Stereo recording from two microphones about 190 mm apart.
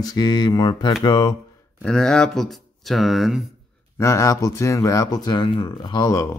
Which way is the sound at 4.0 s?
15° left (ahead or behind).